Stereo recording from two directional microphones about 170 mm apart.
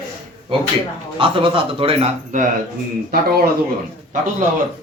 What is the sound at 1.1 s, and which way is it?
Speech, 30° right (ahead or behind).